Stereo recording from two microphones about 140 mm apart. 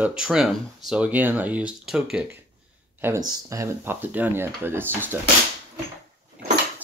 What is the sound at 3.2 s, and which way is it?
Speech, 25° right (ahead or behind).